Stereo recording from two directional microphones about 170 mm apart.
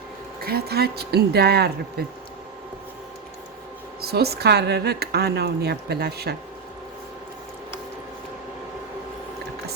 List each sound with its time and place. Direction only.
0.4 s a woman's voice: 70° right (ahead or behind)
4.0 s a woman's voice: 70° right (ahead or behind)